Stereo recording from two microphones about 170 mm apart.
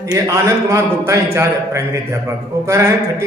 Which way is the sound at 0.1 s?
20° right (ahead or behind).